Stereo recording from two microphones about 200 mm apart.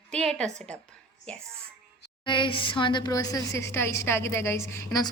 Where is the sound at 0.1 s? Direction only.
5° left (ahead or behind).